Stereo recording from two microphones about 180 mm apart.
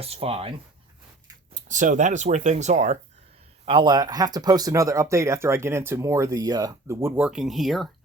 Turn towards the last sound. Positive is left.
turn(degrees=0)  # may be behind; listen again after turning